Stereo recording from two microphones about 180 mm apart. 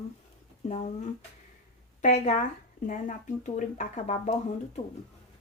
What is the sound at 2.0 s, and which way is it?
Speech, 45° left (ahead or behind).